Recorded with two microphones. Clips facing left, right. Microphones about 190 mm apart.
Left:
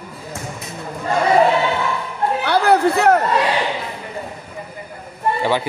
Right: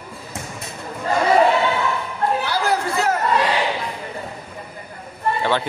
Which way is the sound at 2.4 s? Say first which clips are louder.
Left 7 dB; 60° left (ahead or behind).